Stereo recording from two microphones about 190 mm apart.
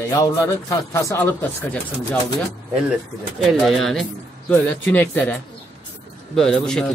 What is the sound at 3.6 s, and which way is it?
Speech, centre (ahead or behind).